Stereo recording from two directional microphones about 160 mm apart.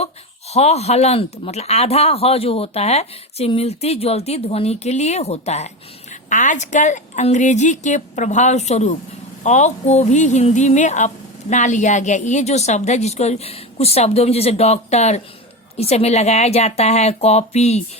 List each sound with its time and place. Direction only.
0.5 s a woman's voice: 40° left (ahead or behind)